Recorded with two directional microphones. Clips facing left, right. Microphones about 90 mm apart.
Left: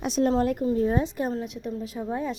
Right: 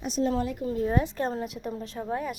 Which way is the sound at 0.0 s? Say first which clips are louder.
Left 4 dB; 90° left.